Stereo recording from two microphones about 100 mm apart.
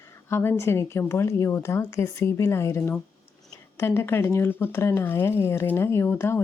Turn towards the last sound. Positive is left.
turn(degrees=25)  # may be behind; listen again after turning